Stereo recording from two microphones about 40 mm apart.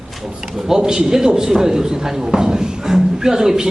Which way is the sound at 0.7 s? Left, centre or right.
Centre.